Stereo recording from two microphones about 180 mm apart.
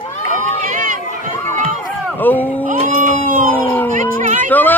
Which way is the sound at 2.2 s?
10° left (ahead or behind).